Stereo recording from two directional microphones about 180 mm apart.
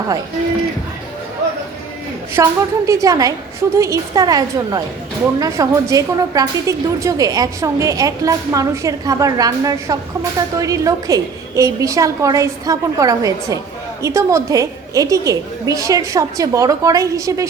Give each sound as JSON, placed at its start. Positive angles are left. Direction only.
{"t": 2.3, "sound": "a woman's voice", "side_deg": -15}